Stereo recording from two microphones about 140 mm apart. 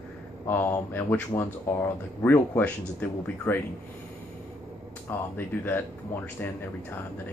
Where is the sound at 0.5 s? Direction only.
15° left (ahead or behind).